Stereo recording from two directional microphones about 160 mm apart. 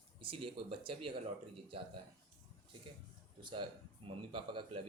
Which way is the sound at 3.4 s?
30° right (ahead or behind).